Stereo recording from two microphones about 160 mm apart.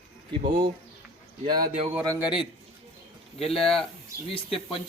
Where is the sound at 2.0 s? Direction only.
20° right (ahead or behind).